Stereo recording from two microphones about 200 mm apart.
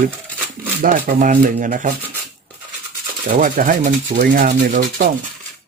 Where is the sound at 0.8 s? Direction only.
45° right (ahead or behind).